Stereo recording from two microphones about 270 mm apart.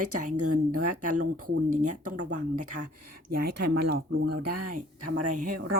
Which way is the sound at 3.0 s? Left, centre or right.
Right.